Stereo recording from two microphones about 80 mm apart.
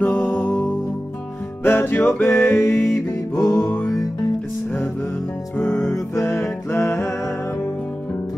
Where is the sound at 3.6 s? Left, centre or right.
Centre.